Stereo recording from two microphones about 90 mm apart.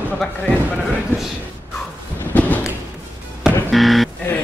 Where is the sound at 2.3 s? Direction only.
20° left (ahead or behind).